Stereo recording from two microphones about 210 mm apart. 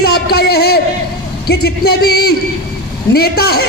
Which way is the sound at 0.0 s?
50° left (ahead or behind).